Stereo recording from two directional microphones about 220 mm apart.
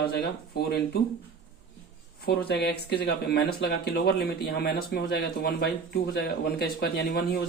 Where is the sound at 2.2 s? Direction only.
45° left (ahead or behind).